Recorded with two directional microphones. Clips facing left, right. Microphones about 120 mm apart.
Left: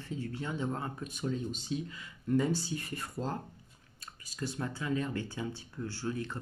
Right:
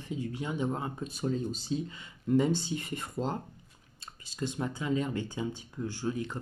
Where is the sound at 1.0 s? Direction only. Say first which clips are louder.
Right 3 dB; 35° right (ahead or behind).